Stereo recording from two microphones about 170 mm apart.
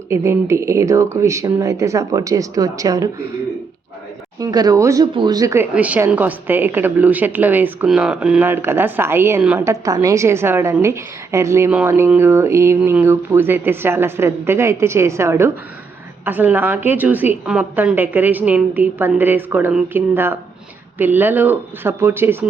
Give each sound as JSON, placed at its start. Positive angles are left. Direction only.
{"t": 0.1, "sound": "a woman's voice", "side_deg": -15}
{"t": 4.4, "sound": "speech", "side_deg": -20}
{"t": 5.7, "sound": "a woman's voice", "side_deg": -10}